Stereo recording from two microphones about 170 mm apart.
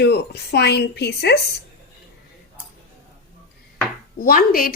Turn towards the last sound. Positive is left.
turn(degrees=60)  # may be behind; listen again after turning